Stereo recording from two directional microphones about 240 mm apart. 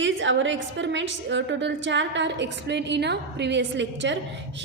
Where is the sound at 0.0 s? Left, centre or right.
Right.